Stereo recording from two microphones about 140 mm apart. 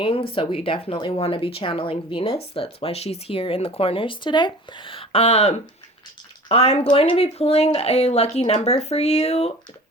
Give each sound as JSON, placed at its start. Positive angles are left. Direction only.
{"t": 0.0, "sound": "speech", "side_deg": 40}